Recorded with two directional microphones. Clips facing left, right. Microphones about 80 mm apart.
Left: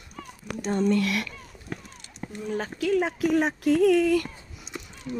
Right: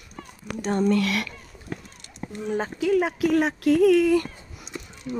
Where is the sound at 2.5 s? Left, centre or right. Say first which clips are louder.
Right 3 dB; right.